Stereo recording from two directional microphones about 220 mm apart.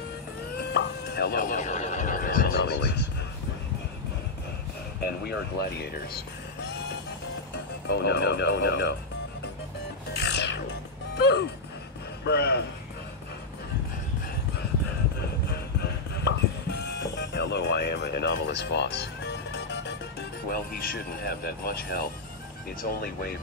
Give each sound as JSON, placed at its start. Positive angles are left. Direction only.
{"t": 0.7, "sound": "neigh", "side_deg": 50}
{"t": 5.0, "sound": "speech", "side_deg": 45}
{"t": 7.5, "sound": "speech", "side_deg": 50}
{"t": 10.2, "sound": "music", "side_deg": 50}
{"t": 12.3, "sound": "speech", "side_deg": 50}
{"t": 15.5, "sound": "music", "side_deg": 50}
{"t": 22.8, "sound": "speech", "side_deg": 45}